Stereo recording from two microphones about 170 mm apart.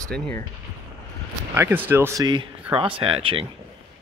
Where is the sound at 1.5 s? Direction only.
15° right (ahead or behind); by 3.4 s 30° right (ahead or behind).